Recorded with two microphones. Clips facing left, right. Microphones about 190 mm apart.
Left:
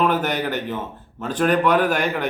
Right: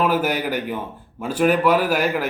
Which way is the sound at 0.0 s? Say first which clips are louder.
Even; 5° right (ahead or behind).